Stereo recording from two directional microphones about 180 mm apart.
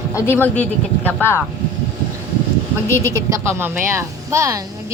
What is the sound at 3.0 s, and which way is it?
A woman's voice, 15° right (ahead or behind).